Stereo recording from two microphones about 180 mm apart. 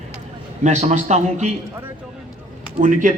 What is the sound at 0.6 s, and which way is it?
Speech, 40° right (ahead or behind).